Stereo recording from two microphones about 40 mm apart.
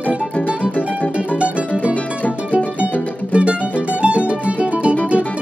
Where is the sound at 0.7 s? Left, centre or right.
Left.